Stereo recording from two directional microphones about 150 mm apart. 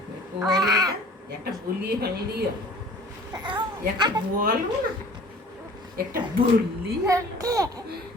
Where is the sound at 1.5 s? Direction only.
90° right.